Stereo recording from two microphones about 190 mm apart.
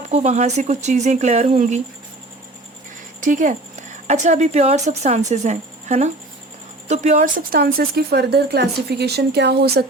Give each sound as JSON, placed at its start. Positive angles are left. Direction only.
{"t": 0.1, "sound": "speech", "side_deg": -35}
{"t": 3.2, "sound": "speech", "side_deg": -45}